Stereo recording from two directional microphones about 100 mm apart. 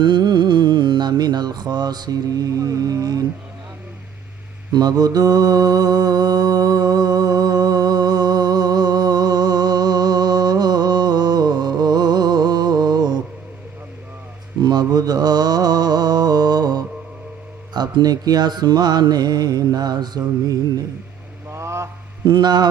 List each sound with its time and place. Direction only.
0.0 s mantra: 50° right (ahead or behind)
4.7 s mantra: 40° right (ahead or behind)
14.6 s mantra: 45° right (ahead or behind)
17.7 s speech: 45° right (ahead or behind)
21.5 s a sound: 30° right (ahead or behind)
22.3 s speech: 45° right (ahead or behind)